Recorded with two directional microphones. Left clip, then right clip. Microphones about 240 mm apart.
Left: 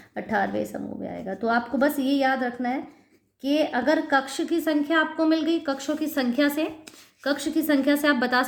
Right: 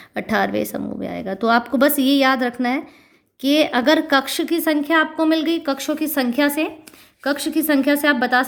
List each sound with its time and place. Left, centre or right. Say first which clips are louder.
0.1 s a woman's voice: right 5 dB; right